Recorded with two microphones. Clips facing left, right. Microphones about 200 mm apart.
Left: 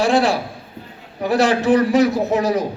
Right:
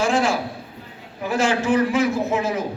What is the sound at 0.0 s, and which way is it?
Speech, 35° left (ahead or behind).